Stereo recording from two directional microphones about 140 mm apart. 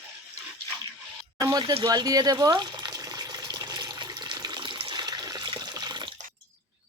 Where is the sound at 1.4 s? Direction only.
30° right (ahead or behind).